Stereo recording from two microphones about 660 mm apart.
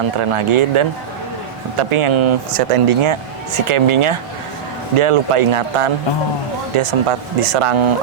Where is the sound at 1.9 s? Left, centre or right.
Right.